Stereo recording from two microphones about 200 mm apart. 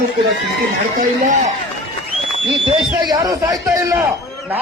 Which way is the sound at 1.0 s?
40° right (ahead or behind).